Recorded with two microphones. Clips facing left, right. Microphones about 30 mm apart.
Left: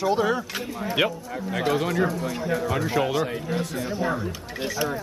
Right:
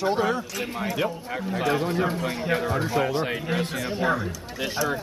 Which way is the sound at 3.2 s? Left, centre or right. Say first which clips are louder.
Right 1 dB; right.